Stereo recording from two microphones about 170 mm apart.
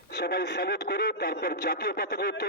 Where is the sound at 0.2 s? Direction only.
70° left (ahead or behind).